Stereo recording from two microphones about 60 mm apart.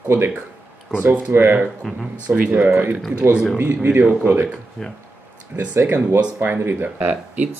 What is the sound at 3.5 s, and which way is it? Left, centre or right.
Speech, right.